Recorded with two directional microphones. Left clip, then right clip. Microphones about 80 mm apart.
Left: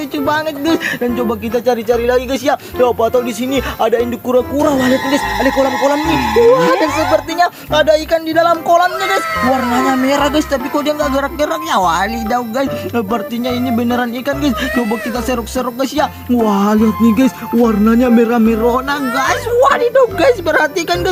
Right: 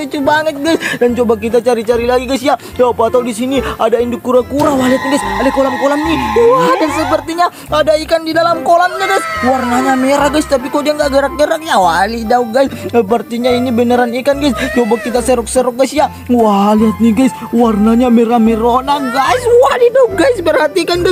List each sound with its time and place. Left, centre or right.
0.3 s speech: right
2.0 s speech: right
6.3 s speech: centre
7.0 s speech: right
8.1 s speech: right
9.4 s speech: centre
10.1 s speech: right
19.5 s a woman's voice: right
20.4 s speech: right